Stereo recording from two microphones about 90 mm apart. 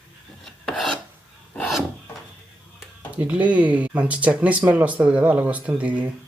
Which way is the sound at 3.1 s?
15° right (ahead or behind).